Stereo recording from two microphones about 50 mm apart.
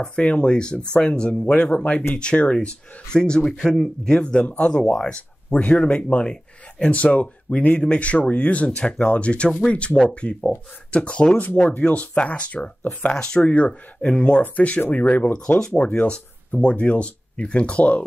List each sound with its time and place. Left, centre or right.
0.0 s speech: left
14.4 s speech: left
16.1 s speech: left